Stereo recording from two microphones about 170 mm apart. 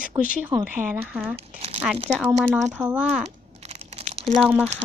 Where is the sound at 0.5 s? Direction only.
25° right (ahead or behind).